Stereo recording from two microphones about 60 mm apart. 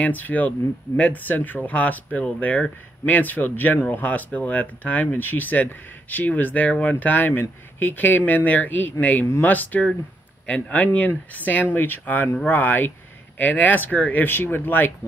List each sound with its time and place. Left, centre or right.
0.0 s speech: left